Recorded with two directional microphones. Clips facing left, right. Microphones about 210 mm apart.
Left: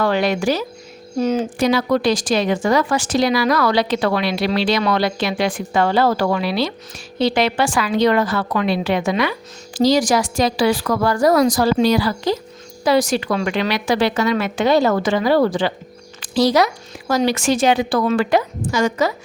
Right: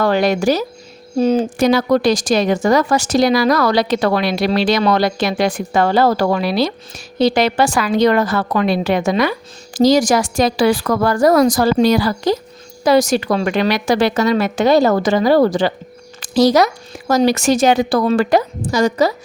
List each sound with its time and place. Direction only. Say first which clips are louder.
0.0 s a woman's voice: right 3 dB; 40° right (ahead or behind)
1.5 s a woman's voice: right 3 dB; 45° right (ahead or behind)